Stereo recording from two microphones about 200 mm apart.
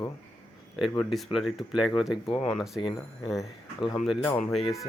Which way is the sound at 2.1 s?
25° left (ahead or behind).